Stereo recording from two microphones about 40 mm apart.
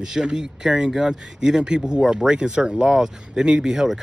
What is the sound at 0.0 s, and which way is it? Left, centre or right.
Speech, centre.